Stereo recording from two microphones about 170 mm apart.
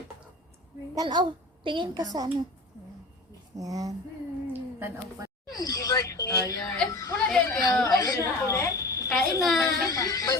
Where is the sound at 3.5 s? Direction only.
20° right (ahead or behind).